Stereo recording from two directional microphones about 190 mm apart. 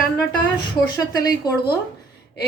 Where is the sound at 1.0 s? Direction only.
20° left (ahead or behind).